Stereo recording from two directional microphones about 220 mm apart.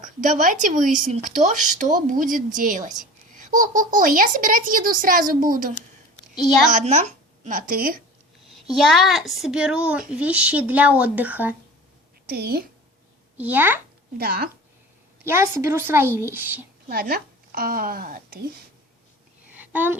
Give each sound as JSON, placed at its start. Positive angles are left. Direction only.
{"t": 0.0, "sound": "a child's voice", "side_deg": -35}
{"t": 8.4, "sound": "a child's voice", "side_deg": 0}
{"t": 12.2, "sound": "a woman's voice", "side_deg": -45}
{"t": 13.3, "sound": "speech", "side_deg": -10}
{"t": 14.2, "sound": "speech", "side_deg": -45}
{"t": 15.2, "sound": "speech", "side_deg": -10}
{"t": 16.9, "sound": "speech", "side_deg": -45}
{"t": 19.5, "sound": "a sound", "side_deg": -10}